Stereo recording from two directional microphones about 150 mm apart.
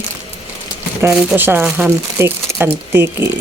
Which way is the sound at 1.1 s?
5° right (ahead or behind).